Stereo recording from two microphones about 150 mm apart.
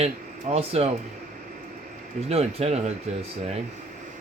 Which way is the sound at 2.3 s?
45° right (ahead or behind).